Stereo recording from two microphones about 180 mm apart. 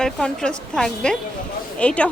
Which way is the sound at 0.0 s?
5° left (ahead or behind).